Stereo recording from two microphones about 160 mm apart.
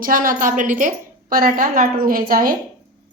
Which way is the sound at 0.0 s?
60° right (ahead or behind).